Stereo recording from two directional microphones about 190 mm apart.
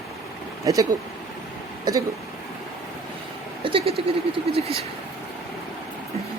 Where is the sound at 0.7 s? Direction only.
20° right (ahead or behind).